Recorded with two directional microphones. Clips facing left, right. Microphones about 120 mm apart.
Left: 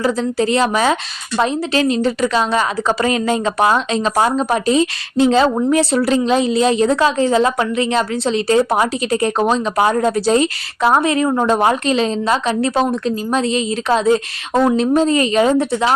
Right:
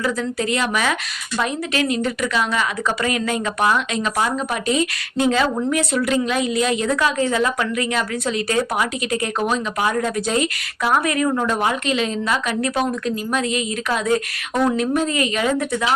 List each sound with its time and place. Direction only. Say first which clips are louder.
0.0 s a woman's voice: left 5 dB; 30° left (ahead or behind)